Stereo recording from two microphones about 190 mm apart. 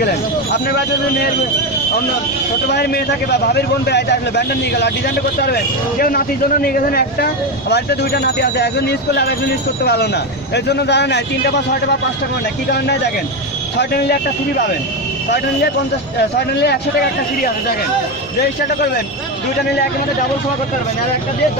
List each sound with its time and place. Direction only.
0.0 s speech: 55° left (ahead or behind)
2.7 s speech: 60° left (ahead or behind)
12.6 s speech: 60° left (ahead or behind)
16.2 s speech: 60° left (ahead or behind)